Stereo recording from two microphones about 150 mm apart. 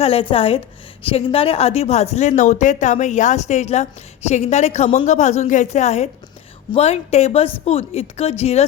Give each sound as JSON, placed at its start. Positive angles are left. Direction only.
{"t": 0.0, "sound": "a woman's voice", "side_deg": 40}